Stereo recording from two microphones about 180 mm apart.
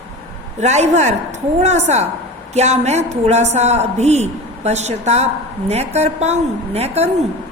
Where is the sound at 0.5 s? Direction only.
40° right (ahead or behind).